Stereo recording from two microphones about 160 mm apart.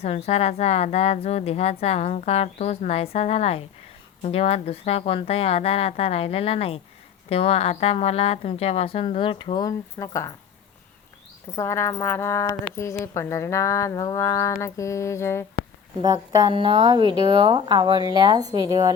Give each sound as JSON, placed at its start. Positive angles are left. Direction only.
{"t": 0.0, "sound": "a woman's voice", "side_deg": 40}
{"t": 11.5, "sound": "speech", "side_deg": 15}
{"t": 16.0, "sound": "speech", "side_deg": -30}